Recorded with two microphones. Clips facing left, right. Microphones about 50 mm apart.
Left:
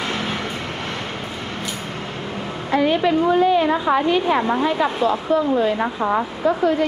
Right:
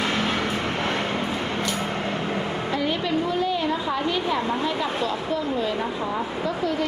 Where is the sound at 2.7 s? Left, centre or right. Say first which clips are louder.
Left 9 dB; left.